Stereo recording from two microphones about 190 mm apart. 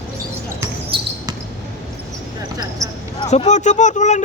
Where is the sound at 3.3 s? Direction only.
40° left (ahead or behind).